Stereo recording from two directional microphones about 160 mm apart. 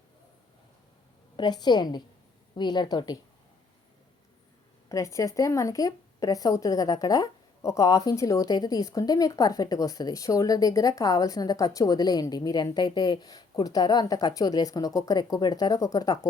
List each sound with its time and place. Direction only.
1.4 s a woman's voice: 25° left (ahead or behind)
4.9 s a woman's voice: 20° left (ahead or behind)